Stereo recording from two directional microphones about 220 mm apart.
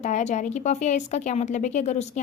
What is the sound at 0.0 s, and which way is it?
A woman's voice, 35° left (ahead or behind).